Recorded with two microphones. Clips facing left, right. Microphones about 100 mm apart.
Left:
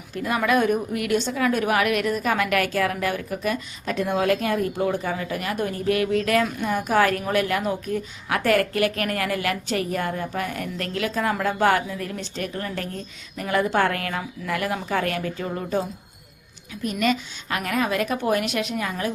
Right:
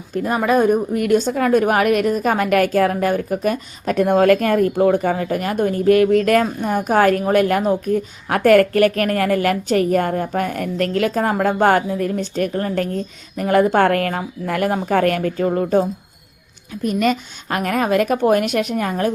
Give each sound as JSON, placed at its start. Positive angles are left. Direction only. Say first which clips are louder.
{"t": 0.3, "sound": "speech", "louder": "right 5 dB", "side_deg": -35}
{"t": 16.8, "sound": "speech", "louder": "right 5 dB", "side_deg": -45}